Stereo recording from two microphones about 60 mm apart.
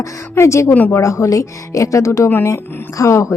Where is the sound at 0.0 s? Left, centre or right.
Left.